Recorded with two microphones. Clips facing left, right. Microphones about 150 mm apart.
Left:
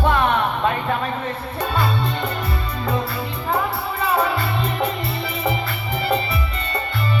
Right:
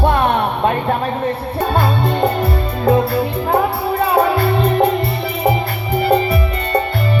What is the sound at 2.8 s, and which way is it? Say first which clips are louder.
Music: right 11 dB; 50° right (ahead or behind).